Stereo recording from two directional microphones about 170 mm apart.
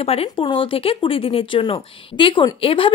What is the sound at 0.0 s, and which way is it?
Speech, 35° left (ahead or behind).